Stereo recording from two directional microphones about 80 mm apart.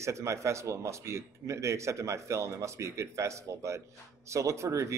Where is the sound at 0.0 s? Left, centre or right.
Right.